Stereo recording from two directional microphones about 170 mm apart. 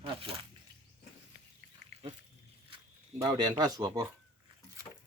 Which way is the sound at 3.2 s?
25° right (ahead or behind).